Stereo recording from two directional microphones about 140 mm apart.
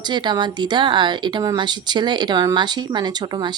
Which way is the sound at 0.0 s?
30° right (ahead or behind).